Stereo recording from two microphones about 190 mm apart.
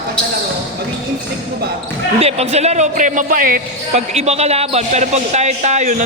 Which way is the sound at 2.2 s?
35° right (ahead or behind).